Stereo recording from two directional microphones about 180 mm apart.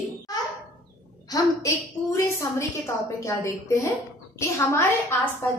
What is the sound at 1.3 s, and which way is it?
A woman's voice, 15° left (ahead or behind).